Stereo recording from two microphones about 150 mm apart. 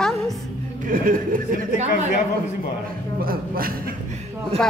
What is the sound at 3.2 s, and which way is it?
Speech, 75° right (ahead or behind).